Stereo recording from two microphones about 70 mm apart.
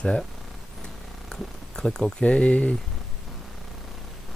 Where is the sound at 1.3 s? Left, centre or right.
Centre.